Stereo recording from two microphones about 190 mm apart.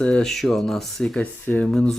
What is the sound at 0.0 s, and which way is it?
Speech, 5° left (ahead or behind).